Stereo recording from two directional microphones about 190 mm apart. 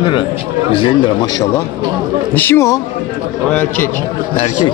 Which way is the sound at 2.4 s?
10° left (ahead or behind).